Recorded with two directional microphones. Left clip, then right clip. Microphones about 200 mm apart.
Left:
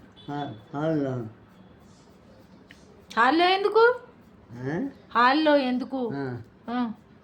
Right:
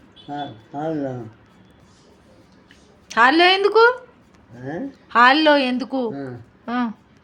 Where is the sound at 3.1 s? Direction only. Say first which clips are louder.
Right 7 dB; 20° right (ahead or behind).